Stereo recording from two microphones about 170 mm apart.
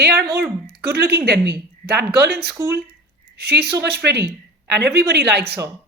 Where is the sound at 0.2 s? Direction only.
65° right (ahead or behind).